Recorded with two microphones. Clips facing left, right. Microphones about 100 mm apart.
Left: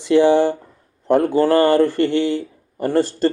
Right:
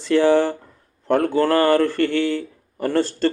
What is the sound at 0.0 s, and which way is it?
Speech, 15° left (ahead or behind).